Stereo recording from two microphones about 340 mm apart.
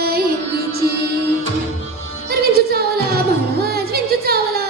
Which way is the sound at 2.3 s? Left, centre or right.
Right.